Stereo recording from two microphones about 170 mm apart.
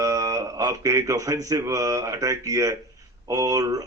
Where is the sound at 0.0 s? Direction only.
20° right (ahead or behind).